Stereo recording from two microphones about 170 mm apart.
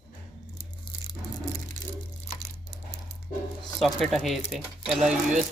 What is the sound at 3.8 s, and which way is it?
Speech, centre (ahead or behind).